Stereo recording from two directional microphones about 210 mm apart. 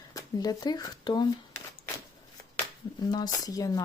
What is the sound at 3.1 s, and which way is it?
Speech, 20° left (ahead or behind).